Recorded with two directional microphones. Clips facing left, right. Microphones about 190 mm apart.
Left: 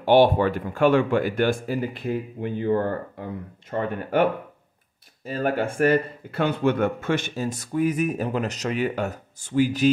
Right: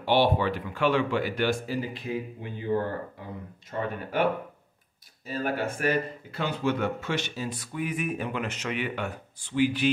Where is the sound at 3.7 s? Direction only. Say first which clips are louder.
Left 5 dB; 60° left (ahead or behind).